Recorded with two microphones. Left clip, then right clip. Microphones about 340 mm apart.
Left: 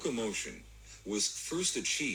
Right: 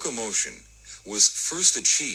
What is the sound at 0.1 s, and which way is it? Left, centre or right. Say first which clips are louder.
Speech: right 6 dB; centre.